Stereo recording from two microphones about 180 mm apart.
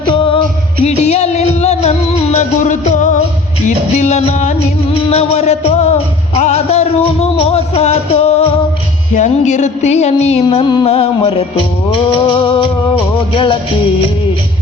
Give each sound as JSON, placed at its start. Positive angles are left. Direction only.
{"t": 0.1, "sound": "music", "side_deg": 30}
{"t": 10.4, "sound": "music", "side_deg": 25}
{"t": 10.8, "sound": "a sound", "side_deg": 35}
{"t": 11.9, "sound": "music", "side_deg": 30}